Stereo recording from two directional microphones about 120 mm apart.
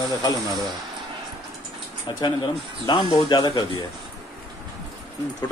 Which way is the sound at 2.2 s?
40° left (ahead or behind).